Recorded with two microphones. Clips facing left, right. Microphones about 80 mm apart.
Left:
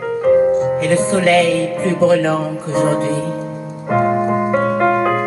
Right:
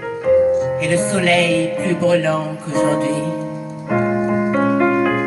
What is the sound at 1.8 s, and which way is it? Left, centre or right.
Music, left.